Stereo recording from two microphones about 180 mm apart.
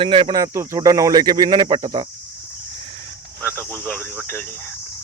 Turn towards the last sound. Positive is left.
turn(degrees=10)  # may be behind; listen again after turning